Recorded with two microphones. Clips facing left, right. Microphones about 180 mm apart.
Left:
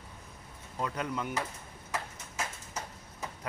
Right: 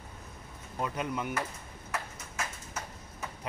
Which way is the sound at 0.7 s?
15° right (ahead or behind).